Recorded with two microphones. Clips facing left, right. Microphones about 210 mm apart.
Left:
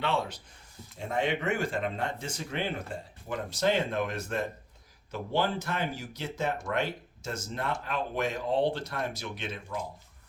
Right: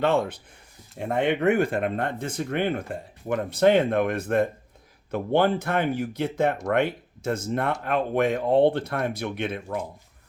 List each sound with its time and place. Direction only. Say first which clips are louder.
0.0 s speech: right 8 dB; 50° right (ahead or behind)